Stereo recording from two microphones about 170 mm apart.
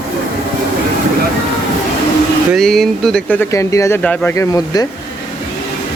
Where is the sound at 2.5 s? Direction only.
Centre (ahead or behind); by 4.9 s 20° left (ahead or behind).